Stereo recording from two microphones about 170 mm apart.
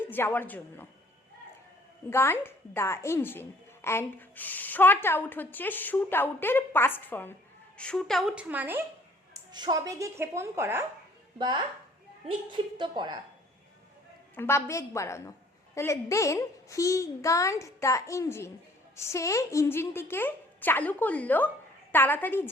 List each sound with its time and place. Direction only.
0.0 s a woman's voice: 10° left (ahead or behind)
2.0 s a woman's voice: 15° left (ahead or behind); by 8.8 s 10° right (ahead or behind)
9.3 s speech: 25° right (ahead or behind)
11.3 s speech: 25° right (ahead or behind)
14.3 s a woman's voice: 15° left (ahead or behind)